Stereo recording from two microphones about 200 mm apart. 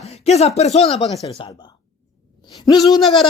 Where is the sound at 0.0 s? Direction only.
30° left (ahead or behind).